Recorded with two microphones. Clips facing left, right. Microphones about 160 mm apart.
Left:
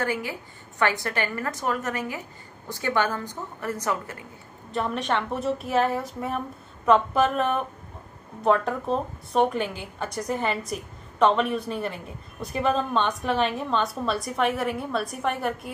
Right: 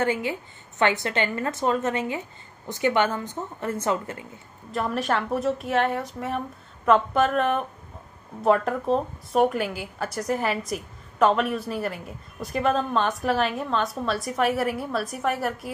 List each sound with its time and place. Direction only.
0.0 s a woman's voice: 20° right (ahead or behind)
4.7 s a woman's voice: 5° right (ahead or behind)